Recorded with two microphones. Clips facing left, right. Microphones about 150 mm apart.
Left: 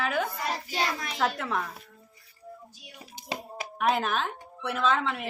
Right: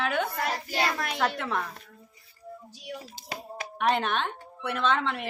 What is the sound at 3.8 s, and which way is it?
A woman's voice, 5° left (ahead or behind).